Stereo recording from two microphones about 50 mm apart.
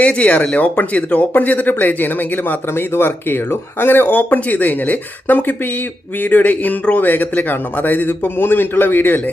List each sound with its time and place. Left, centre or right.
0.0 s speech: left